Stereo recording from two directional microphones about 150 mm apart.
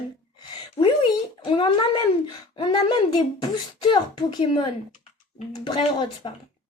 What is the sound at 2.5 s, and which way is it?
Speech, 30° left (ahead or behind).